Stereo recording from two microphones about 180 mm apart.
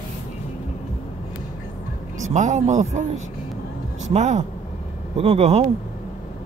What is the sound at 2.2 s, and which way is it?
Speech, 40° right (ahead or behind).